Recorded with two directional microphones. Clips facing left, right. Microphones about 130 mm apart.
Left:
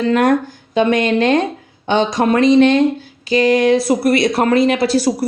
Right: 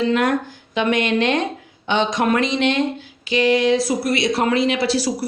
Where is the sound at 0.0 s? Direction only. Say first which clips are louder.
Left 4 dB; 45° left (ahead or behind).